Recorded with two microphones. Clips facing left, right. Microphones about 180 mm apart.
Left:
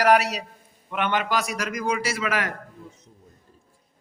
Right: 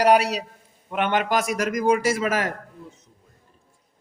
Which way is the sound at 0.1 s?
30° right (ahead or behind).